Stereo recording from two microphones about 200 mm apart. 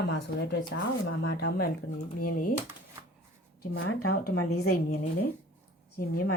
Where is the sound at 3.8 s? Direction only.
90° left.